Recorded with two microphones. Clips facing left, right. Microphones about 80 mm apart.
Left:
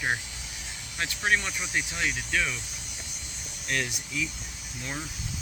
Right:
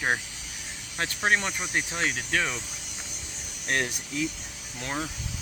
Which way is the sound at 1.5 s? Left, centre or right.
Right.